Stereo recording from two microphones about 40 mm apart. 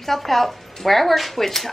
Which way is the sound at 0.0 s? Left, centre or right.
Centre.